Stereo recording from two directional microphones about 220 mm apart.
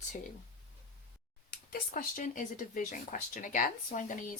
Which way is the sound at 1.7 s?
40° left (ahead or behind).